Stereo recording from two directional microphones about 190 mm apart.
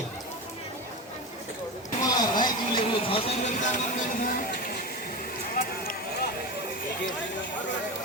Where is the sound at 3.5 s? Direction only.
45° left (ahead or behind).